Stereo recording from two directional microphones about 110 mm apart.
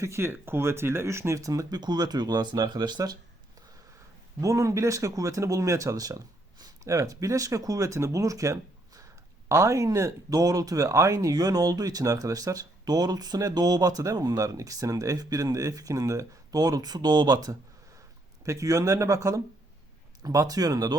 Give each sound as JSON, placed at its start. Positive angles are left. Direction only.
{"t": 0.0, "sound": "speech", "side_deg": -25}
{"t": 4.4, "sound": "speech", "side_deg": -30}